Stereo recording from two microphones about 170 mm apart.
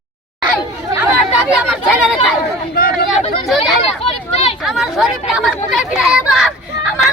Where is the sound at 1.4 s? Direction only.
5° right (ahead or behind).